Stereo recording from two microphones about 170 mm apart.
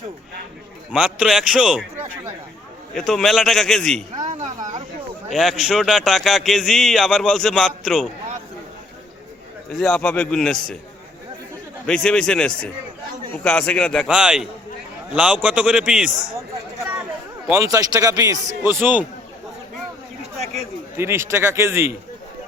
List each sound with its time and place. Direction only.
0.9 s a man's voice: 5° right (ahead or behind)
4.1 s a sound: 45° right (ahead or behind)
5.3 s a man's voice: centre (ahead or behind)
9.7 s a man's voice: 5° left (ahead or behind)
11.9 s a man's voice: 5° left (ahead or behind)
17.5 s a man's voice: 20° right (ahead or behind)
20.9 s a man's voice: 15° right (ahead or behind)